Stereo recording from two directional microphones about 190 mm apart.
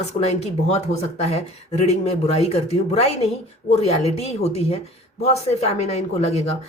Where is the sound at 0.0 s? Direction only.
35° left (ahead or behind).